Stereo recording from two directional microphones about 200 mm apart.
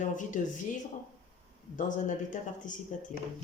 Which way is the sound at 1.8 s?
40° left (ahead or behind).